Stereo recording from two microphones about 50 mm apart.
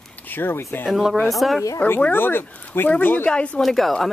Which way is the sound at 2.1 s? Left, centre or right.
Left.